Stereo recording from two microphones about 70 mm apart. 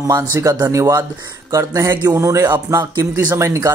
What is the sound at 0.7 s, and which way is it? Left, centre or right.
Speech, right.